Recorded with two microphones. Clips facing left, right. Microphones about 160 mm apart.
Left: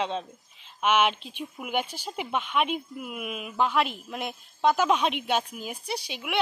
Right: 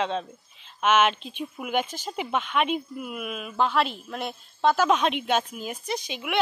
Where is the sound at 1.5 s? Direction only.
10° left (ahead or behind).